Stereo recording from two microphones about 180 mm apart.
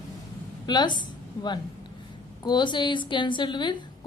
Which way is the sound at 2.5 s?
25° left (ahead or behind).